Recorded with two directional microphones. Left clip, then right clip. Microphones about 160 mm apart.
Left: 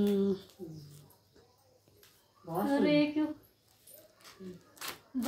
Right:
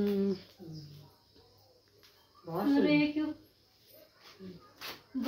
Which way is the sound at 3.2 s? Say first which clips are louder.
Left 1 dB; 40° left (ahead or behind).